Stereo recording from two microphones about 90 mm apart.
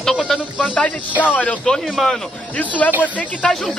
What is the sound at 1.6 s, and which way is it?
Speech, centre (ahead or behind).